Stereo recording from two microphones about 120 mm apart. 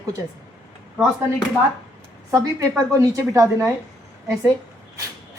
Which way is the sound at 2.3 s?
30° right (ahead or behind).